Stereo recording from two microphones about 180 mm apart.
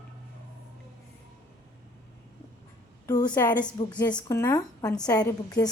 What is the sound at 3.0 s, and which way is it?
Speech, 20° left (ahead or behind).